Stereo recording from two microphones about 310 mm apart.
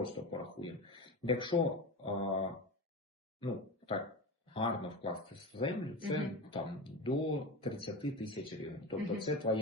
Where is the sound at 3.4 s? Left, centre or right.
Centre.